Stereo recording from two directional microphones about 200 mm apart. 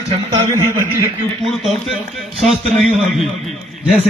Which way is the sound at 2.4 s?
Centre (ahead or behind).